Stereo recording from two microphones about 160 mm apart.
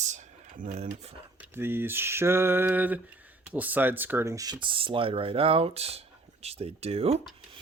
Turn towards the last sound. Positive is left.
turn(degrees=-40)  # may be behind; listen again after turning